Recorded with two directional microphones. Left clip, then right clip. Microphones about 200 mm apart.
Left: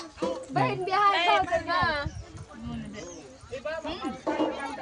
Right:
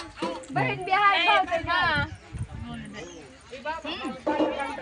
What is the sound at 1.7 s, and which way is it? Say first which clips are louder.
Speech: right 2 dB; 5° right (ahead or behind).